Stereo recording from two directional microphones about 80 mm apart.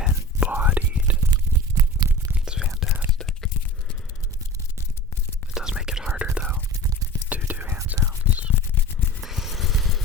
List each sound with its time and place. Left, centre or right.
0.0 s whispering: centre
1.3 s a sound: right
2.3 s whispering: centre
3.2 s a sound: centre
5.5 s whispering: centre
9.2 s vehicle: centre